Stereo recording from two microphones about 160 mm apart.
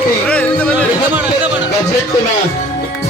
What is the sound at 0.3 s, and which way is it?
Music, 10° left (ahead or behind).